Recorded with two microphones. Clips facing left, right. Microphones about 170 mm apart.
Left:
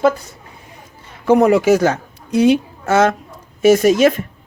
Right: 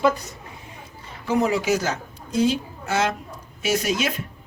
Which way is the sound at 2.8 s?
50° left (ahead or behind).